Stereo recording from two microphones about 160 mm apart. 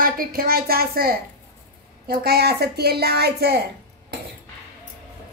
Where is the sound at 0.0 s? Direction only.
65° right (ahead or behind); by 3.6 s 80° right.